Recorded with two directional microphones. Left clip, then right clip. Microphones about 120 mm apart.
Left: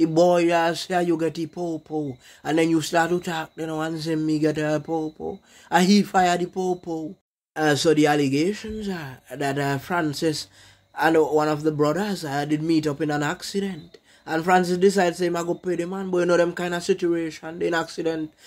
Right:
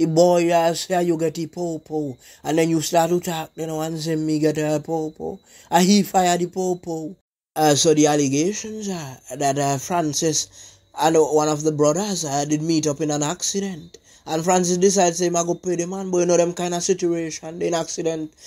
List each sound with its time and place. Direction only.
0.0 s speech: 20° right (ahead or behind)
7.5 s speech: 35° right (ahead or behind)
7.8 s speech: 25° right (ahead or behind)